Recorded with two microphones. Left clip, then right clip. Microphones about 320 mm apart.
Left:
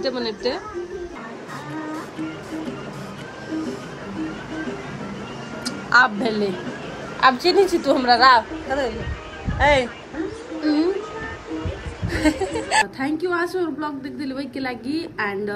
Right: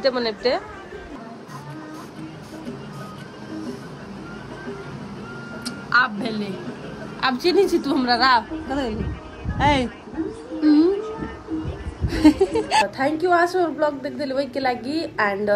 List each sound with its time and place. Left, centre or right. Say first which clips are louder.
0.0 s a woman's voice: right 3 dB; centre
5.7 s a woman's voice: left 3 dB; centre; by 9.8 s right
10.6 s music: right 4 dB; centre
12.1 s speech: right 4 dB; right
12.9 s a woman's voice: right 5 dB; centre